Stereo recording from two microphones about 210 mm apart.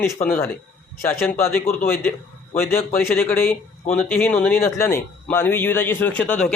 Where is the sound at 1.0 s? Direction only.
10° left (ahead or behind).